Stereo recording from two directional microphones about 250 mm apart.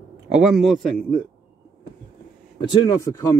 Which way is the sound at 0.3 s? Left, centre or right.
Centre.